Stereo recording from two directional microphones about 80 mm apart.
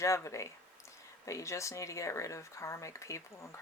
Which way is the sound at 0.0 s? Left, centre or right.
Left.